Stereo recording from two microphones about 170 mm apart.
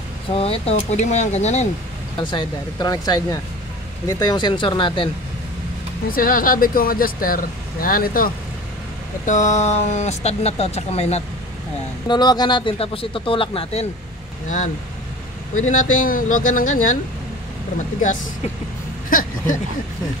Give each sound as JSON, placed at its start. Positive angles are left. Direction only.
{"t": 0.3, "sound": "speech", "side_deg": 35}
{"t": 2.1, "sound": "speech", "side_deg": 30}
{"t": 6.0, "sound": "speech", "side_deg": 55}
{"t": 9.2, "sound": "speech", "side_deg": 45}
{"t": 12.1, "sound": "speech", "side_deg": 25}
{"t": 15.5, "sound": "speech", "side_deg": 50}
{"t": 19.0, "sound": "speech", "side_deg": 50}